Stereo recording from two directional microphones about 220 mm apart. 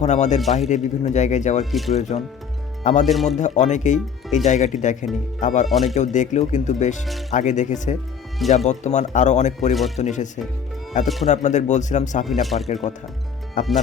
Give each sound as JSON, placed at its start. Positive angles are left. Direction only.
{"t": 0.0, "sound": "speech", "side_deg": 30}
{"t": 1.7, "sound": "speech", "side_deg": 0}
{"t": 2.0, "sound": "speech", "side_deg": 30}
{"t": 3.1, "sound": "speech", "side_deg": 0}
{"t": 3.3, "sound": "speech", "side_deg": 35}
{"t": 5.6, "sound": "speech", "side_deg": 0}
{"t": 5.9, "sound": "speech", "side_deg": 35}
{"t": 9.7, "sound": "speech", "side_deg": 0}
{"t": 10.0, "sound": "speech", "side_deg": 35}
{"t": 11.0, "sound": "speech", "side_deg": 0}
{"t": 11.3, "sound": "speech", "side_deg": 35}
{"t": 12.2, "sound": "speech", "side_deg": 0}
{"t": 12.6, "sound": "speech", "side_deg": 30}